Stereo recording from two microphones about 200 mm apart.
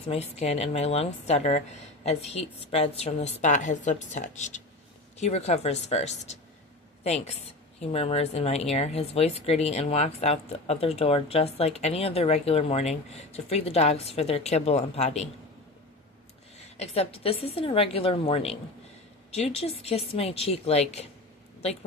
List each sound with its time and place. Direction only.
0.1 s speech: 30° left (ahead or behind)
16.7 s a woman's voice: 30° left (ahead or behind)